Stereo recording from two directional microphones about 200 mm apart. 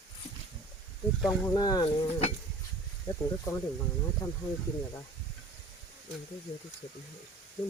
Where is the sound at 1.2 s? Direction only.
20° left (ahead or behind).